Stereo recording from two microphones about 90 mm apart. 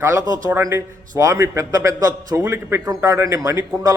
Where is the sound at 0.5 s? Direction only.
30° right (ahead or behind).